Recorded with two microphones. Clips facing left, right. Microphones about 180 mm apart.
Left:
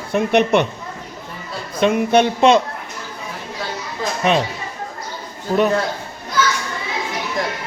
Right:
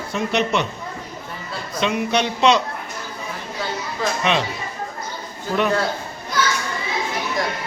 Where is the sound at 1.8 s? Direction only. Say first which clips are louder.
Left 6 dB; 50° left (ahead or behind).